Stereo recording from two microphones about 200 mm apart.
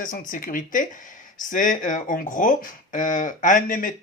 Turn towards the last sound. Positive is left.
turn(degrees=40)  # may be behind; listen again after turning